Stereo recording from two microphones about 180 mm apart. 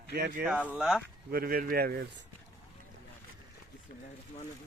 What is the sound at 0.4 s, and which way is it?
Speech, 5° right (ahead or behind).